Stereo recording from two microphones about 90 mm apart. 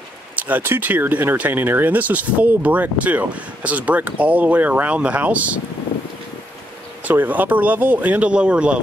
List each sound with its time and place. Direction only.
0.4 s speech: 20° right (ahead or behind)
7.1 s speech: 20° right (ahead or behind)